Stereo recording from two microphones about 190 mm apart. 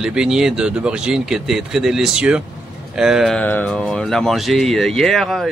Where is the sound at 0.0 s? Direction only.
5° right (ahead or behind).